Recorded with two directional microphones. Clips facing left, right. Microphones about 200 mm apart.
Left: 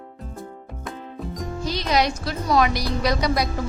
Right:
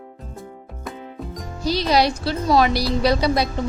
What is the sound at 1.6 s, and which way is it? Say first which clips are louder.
A woman's voice: right 4 dB; 35° right (ahead or behind).